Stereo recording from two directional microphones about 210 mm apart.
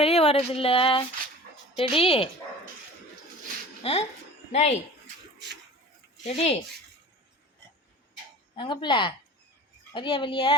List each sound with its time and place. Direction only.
0.0 s speech: 30° left (ahead or behind)
3.8 s speech: 30° left (ahead or behind)
6.2 s speech: 30° left (ahead or behind)
8.5 s speech: 20° left (ahead or behind)